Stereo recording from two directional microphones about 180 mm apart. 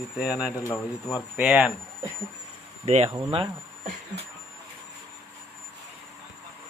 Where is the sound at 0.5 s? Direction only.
20° left (ahead or behind).